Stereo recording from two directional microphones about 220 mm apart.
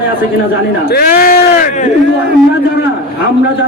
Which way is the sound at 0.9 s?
45° left (ahead or behind).